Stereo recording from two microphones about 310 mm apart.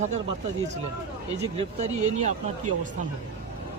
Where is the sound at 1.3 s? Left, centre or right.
Right.